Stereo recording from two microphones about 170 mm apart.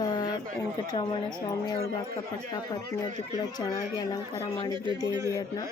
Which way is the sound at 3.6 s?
20° left (ahead or behind).